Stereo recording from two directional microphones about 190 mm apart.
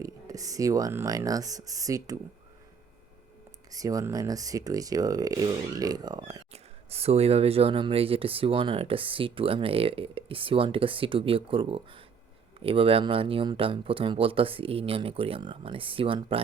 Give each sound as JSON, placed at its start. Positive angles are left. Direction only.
{"t": 0.0, "sound": "speech", "side_deg": -20}
{"t": 3.7, "sound": "speech", "side_deg": -20}
{"t": 6.5, "sound": "speech", "side_deg": -30}